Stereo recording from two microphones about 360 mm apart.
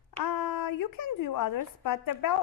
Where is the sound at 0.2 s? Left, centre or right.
Left.